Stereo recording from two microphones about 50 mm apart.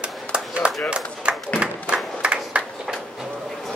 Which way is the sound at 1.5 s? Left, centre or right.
Centre.